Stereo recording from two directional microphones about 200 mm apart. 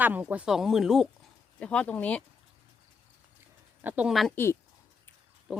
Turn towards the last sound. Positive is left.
turn(degrees=-5)  # may be behind; listen again after turning